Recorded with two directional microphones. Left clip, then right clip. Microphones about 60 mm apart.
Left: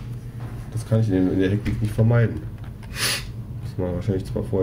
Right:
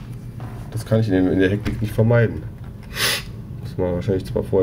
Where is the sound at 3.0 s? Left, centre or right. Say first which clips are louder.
Right 4 dB; centre.